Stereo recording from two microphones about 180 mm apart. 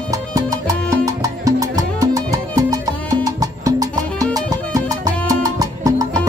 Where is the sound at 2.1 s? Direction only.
20° right (ahead or behind).